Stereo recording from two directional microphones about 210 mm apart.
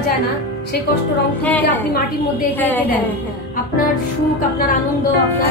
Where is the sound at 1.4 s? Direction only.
5° left (ahead or behind).